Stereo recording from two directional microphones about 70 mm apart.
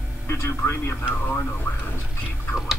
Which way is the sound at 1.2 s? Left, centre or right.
Left.